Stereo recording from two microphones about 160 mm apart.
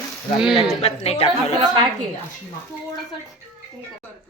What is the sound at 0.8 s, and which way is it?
Speech, 40° left (ahead or behind).